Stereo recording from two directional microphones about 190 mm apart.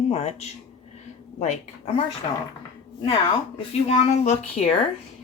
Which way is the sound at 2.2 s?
30° left (ahead or behind).